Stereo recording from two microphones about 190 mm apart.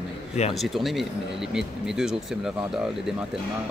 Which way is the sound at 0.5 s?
Centre (ahead or behind).